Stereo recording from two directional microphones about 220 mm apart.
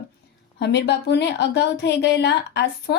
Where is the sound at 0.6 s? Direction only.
50° left (ahead or behind).